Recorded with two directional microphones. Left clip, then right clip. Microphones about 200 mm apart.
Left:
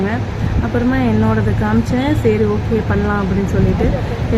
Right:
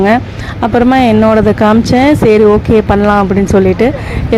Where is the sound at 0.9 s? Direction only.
45° right (ahead or behind).